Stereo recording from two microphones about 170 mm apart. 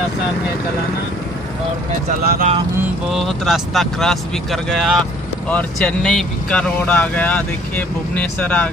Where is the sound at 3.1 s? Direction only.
Centre (ahead or behind).